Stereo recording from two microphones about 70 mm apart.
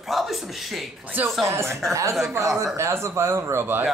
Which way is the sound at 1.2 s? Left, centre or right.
Right.